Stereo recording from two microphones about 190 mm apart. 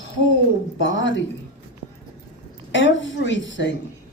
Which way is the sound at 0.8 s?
75° left (ahead or behind).